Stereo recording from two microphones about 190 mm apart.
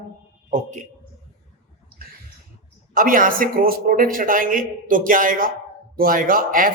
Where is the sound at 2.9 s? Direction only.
45° right (ahead or behind).